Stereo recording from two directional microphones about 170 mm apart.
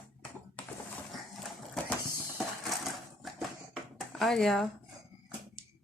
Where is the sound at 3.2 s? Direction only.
Centre (ahead or behind).